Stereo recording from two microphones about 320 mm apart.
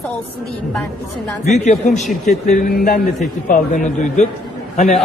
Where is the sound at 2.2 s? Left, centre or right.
Left.